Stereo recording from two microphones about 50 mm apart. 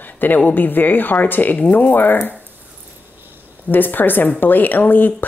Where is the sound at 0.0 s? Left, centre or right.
Left.